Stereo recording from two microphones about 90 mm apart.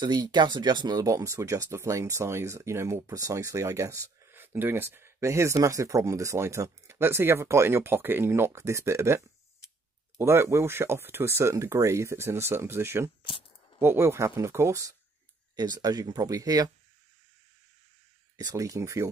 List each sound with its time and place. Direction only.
0.0 s speech: 50° right (ahead or behind)
1.0 s speech: 35° right (ahead or behind)
4.3 s speech: 25° right (ahead or behind)
15.5 s speech: 45° right (ahead or behind)
18.3 s speech: 40° right (ahead or behind)